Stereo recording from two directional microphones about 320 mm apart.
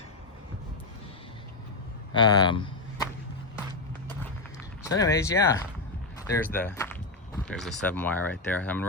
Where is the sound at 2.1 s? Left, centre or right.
Centre.